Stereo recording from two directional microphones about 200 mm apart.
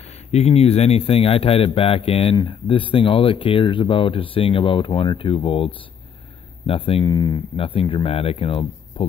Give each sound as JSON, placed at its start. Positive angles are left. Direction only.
{"t": 0.3, "sound": "a man's voice", "side_deg": 30}